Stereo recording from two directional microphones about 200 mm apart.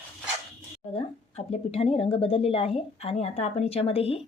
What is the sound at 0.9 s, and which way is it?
Speech, 30° left (ahead or behind).